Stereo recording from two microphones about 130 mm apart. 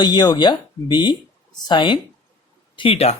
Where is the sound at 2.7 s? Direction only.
45° left (ahead or behind).